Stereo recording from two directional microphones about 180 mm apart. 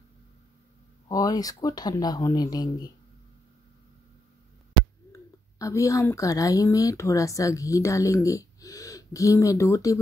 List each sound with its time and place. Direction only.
1.0 s speech: 20° left (ahead or behind)
5.1 s a woman's voice: 15° left (ahead or behind)